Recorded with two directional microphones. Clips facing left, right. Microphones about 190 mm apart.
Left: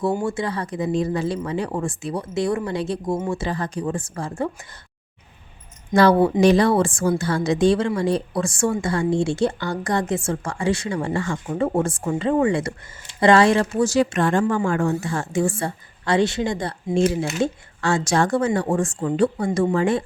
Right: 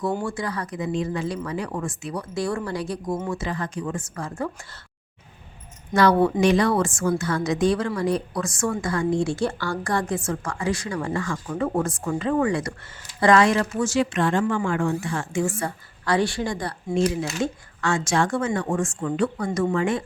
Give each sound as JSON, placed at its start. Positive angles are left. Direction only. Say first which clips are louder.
{"t": 0.2, "sound": "a woman's voice", "louder": "left 4 dB", "side_deg": 25}
{"t": 5.9, "sound": "a woman's voice", "louder": "left 3 dB", "side_deg": 30}